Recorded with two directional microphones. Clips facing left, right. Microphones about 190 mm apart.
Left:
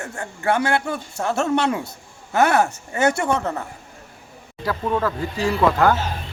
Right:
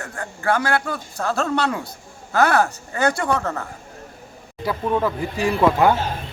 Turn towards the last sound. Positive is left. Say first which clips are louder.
# right 1 dB
turn(degrees=-15)  # may be behind; listen again after turning